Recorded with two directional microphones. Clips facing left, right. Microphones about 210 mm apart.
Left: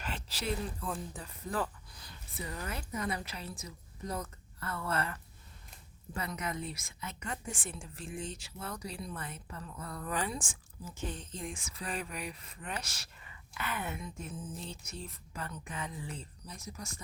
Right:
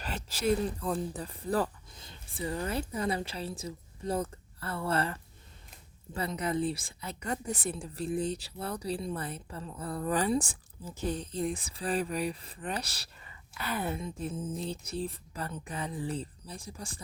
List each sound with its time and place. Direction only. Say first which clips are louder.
0.0 s speech: right 7 dB; 40° right (ahead or behind)
1.9 s a woman's voice: right 2 dB; 25° right (ahead or behind)